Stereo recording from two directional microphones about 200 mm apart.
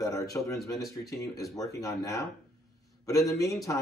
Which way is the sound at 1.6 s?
15° left (ahead or behind).